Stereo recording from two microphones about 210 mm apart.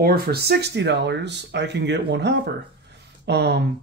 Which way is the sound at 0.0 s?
45° right (ahead or behind).